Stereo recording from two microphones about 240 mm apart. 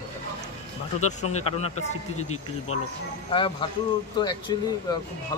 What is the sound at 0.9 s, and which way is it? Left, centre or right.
Speech, left.